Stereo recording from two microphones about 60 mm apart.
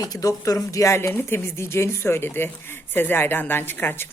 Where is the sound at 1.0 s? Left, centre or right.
Left.